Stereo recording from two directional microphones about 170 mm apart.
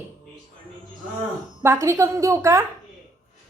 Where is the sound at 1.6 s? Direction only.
15° right (ahead or behind).